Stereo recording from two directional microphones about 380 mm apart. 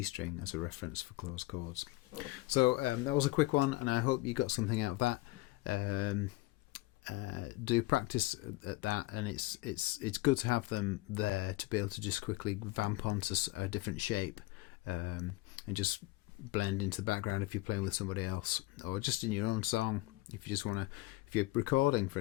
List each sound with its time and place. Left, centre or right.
0.0 s speech: left